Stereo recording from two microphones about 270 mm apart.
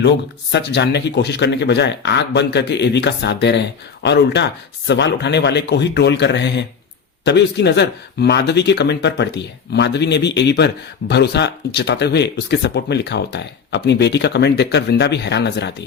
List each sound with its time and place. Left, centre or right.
0.5 s speech: left